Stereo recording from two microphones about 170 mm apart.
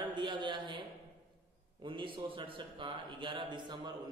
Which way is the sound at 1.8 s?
30° right (ahead or behind).